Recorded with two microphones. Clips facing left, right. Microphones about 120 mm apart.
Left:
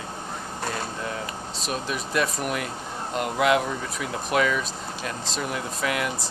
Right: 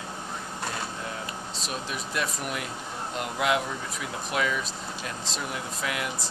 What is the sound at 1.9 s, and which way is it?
Speech, 55° left (ahead or behind).